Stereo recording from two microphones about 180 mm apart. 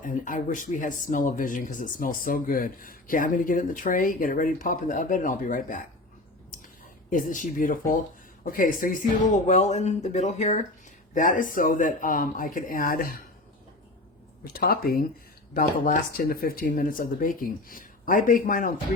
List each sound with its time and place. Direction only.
0.0 s speech: 45° left (ahead or behind)
7.1 s speech: 45° left (ahead or behind)
14.5 s speech: 55° left (ahead or behind)